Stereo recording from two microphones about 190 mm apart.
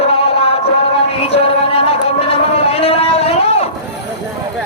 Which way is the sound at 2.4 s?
30° left (ahead or behind).